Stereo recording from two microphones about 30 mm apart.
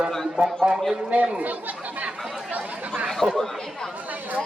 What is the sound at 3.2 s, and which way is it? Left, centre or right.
Speech, right.